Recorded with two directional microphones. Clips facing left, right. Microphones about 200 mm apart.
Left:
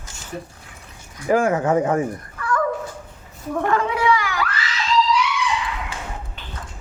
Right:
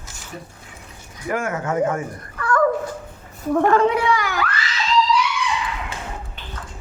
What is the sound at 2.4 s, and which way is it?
Dog, 60° right (ahead or behind).